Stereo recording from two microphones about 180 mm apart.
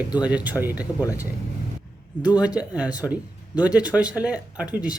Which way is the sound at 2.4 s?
5° right (ahead or behind).